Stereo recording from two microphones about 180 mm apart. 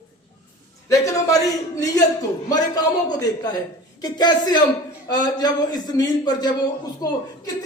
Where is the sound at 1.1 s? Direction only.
20° left (ahead or behind).